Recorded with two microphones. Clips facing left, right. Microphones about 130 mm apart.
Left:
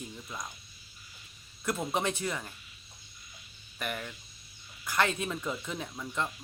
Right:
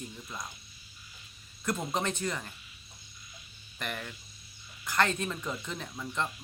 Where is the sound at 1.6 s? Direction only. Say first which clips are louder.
Left 1 dB; 5° left (ahead or behind).